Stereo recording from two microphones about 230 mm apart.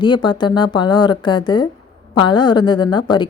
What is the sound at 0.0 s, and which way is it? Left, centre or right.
A woman's voice, centre.